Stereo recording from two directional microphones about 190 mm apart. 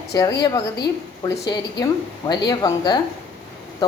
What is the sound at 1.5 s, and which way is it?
A woman's voice, 20° left (ahead or behind).